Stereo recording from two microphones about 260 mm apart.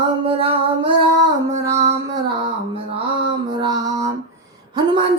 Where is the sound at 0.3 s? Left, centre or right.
Right.